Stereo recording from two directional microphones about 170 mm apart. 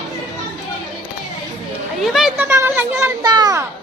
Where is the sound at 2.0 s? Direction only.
Centre (ahead or behind).